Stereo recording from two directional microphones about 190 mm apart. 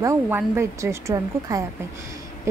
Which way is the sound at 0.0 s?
15° right (ahead or behind).